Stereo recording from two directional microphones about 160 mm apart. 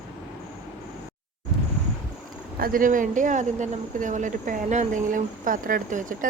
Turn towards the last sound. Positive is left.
turn(degrees=-55)  # may be behind; listen again after turning